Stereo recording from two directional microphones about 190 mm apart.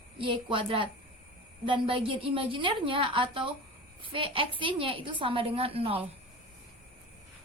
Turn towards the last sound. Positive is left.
turn(degrees=-30)  # may be behind; listen again after turning